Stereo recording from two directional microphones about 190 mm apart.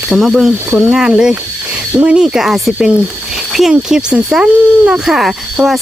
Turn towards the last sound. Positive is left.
turn(degrees=0)  # may be behind; listen again after turning